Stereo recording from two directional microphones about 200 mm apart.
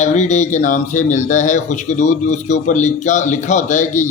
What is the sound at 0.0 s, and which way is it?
Speech, 35° left (ahead or behind).